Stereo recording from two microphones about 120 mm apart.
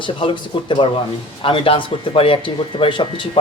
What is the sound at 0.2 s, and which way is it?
Speech, 45° left (ahead or behind).